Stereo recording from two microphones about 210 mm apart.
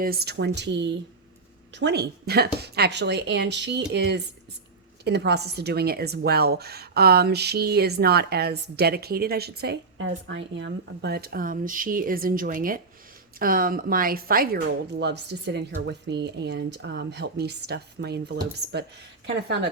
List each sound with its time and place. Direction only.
0.0 s speech: 45° right (ahead or behind)